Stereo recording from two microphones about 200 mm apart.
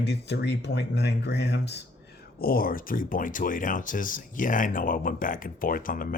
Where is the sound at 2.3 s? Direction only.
45° left (ahead or behind).